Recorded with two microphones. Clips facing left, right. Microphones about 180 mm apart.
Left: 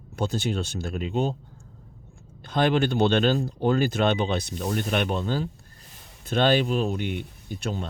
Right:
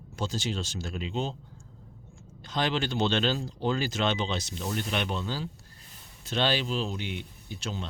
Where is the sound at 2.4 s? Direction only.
55° left (ahead or behind).